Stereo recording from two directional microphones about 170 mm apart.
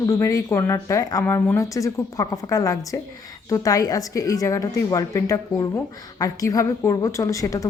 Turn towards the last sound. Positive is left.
turn(degrees=20)  # may be behind; listen again after turning